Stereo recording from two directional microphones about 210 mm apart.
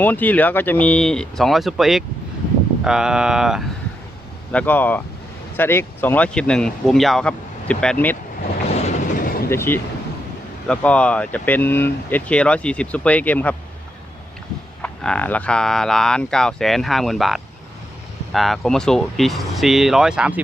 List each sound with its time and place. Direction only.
0.0 s speech: 10° left (ahead or behind)
4.5 s speech: 10° left (ahead or behind)
8.7 s train: 35° left (ahead or behind)
9.5 s speech: 10° left (ahead or behind)
14.8 s speech: 5° left (ahead or behind)